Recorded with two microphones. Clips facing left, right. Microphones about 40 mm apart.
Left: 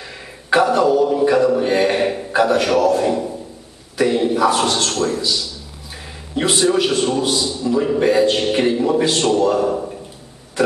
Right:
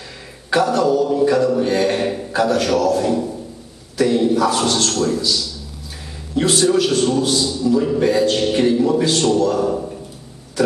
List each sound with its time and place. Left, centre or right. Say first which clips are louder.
0.5 s a man's voice: left 2 dB; centre